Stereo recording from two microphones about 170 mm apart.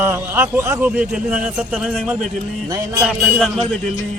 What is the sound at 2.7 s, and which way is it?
Speech, 20° right (ahead or behind).